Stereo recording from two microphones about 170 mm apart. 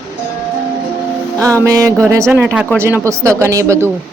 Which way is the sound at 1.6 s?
20° right (ahead or behind).